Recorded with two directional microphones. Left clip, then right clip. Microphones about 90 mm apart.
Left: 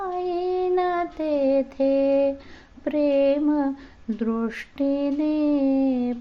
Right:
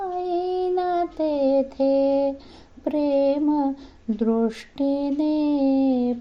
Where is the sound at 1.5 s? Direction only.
35° right (ahead or behind).